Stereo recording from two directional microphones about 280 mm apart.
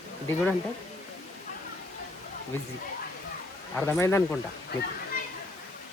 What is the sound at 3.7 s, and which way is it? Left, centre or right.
Speech, centre.